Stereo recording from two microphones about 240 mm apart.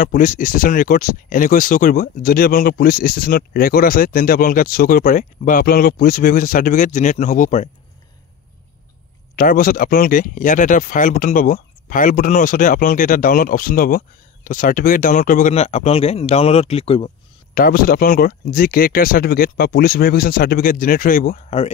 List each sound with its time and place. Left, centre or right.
0.0 s speech: left
9.3 s speech: left
17.6 s speech: left